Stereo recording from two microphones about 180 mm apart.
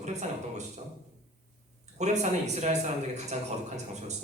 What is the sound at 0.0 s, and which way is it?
Speech, 40° right (ahead or behind).